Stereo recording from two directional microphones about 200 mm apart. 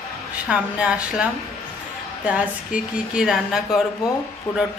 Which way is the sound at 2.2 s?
5° right (ahead or behind).